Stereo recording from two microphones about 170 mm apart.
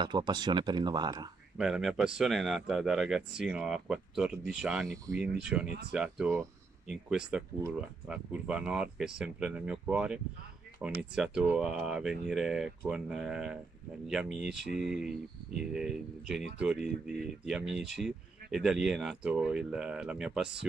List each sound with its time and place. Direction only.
0.0 s speech: 25° right (ahead or behind)
1.6 s speech: centre (ahead or behind)